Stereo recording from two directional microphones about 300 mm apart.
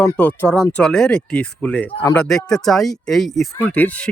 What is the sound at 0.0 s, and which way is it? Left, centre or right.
Speech, centre.